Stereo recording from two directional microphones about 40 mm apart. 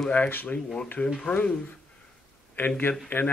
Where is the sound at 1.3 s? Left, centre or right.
Left.